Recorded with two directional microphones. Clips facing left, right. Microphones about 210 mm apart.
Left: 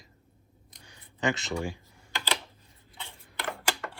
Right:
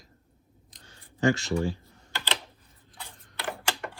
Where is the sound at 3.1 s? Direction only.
Centre (ahead or behind).